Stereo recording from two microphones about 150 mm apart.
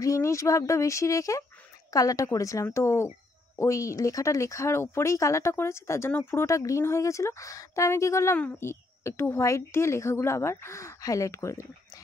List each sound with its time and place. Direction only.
0.0 s speech: 20° left (ahead or behind)